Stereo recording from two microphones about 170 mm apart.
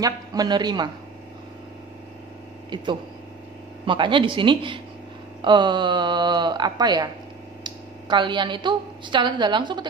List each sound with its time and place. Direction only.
0.0 s speech: 20° right (ahead or behind)
2.7 s a woman's voice: 25° right (ahead or behind)